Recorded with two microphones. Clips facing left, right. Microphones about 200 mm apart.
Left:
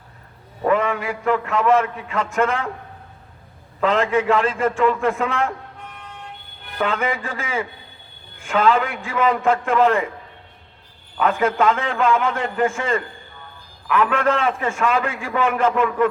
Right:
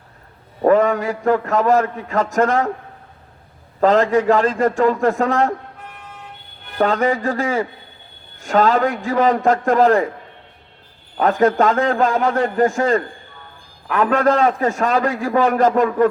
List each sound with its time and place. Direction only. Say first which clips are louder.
0.6 s a man's voice: right 5 dB; 40° right (ahead or behind)
3.8 s a man's voice: right 4 dB; 35° right (ahead or behind)
6.7 s a man's voice: right 6 dB; 40° right (ahead or behind)
11.2 s a man's voice: right 4 dB; 40° right (ahead or behind)